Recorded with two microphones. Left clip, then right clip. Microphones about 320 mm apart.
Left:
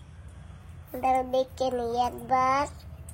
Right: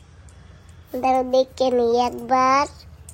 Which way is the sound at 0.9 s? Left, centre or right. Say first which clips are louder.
Right 6 dB; right.